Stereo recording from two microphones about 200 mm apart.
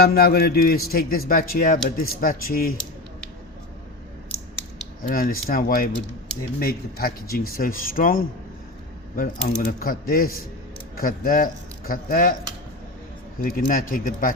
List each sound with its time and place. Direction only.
0.0 s speech: 50° left (ahead or behind)
5.0 s speech: 45° left (ahead or behind)
13.4 s speech: 45° left (ahead or behind)